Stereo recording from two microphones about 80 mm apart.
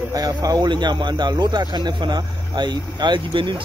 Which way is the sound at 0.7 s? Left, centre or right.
Right.